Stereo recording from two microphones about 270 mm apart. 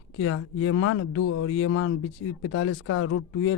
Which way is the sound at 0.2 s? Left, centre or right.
Left.